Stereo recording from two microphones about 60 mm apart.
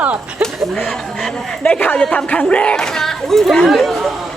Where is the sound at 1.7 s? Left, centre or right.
Left.